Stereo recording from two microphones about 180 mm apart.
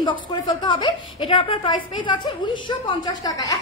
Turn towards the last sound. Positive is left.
turn(degrees=25)  # may be behind; listen again after turning